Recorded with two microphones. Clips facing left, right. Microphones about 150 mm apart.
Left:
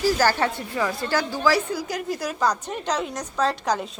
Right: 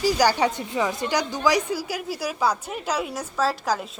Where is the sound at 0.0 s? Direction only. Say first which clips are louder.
Right 1 dB; 15° right (ahead or behind).